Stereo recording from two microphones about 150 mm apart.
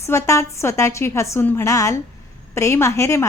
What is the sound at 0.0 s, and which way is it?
A woman's voice, 20° left (ahead or behind).